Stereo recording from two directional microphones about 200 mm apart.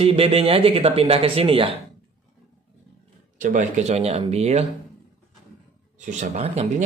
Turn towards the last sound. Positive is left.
turn(degrees=-35)  # may be behind; listen again after turning